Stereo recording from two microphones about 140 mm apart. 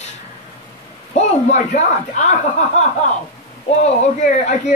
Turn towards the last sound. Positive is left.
turn(degrees=55)  # may be behind; listen again after turning